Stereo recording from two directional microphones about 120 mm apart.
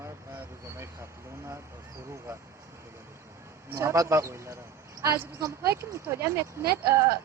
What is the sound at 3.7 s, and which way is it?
Speech, 20° right (ahead or behind).